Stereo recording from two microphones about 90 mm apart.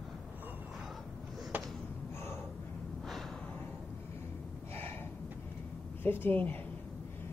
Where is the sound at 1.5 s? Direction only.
20° right (ahead or behind).